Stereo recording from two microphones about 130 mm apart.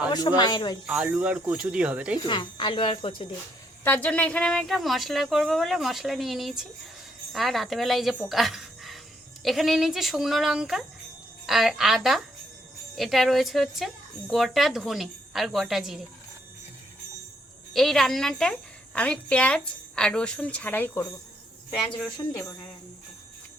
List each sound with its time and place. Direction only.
0.1 s speech: 35° left (ahead or behind)
0.9 s speech: 10° right (ahead or behind)
2.2 s speech: 35° left (ahead or behind)
3.8 s a woman's voice: 10° left (ahead or behind); by 16.0 s 5° right (ahead or behind)
17.7 s a woman's voice: 5° left (ahead or behind); by 21.1 s 20° left (ahead or behind)
21.7 s a woman's voice: 5° left (ahead or behind)
22.3 s speech: 25° left (ahead or behind)